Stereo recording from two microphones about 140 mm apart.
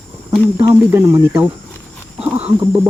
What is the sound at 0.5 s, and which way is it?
Speech, 15° right (ahead or behind).